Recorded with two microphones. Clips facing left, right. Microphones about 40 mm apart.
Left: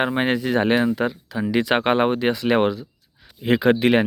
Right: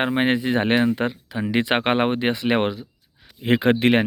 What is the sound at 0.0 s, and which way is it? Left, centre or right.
Speech, right.